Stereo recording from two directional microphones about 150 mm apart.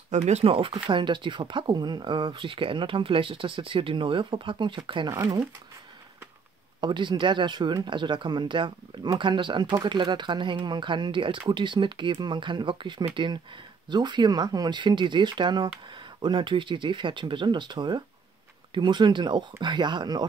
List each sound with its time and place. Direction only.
0.1 s speech: 50° right (ahead or behind); by 5.4 s 30° right (ahead or behind)
6.8 s speech: 30° right (ahead or behind)